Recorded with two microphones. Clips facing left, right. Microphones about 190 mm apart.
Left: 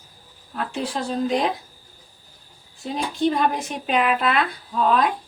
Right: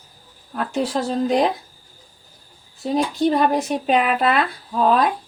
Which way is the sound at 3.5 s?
40° right (ahead or behind).